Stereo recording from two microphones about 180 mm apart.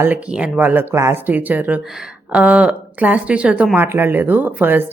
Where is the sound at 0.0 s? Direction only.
10° right (ahead or behind).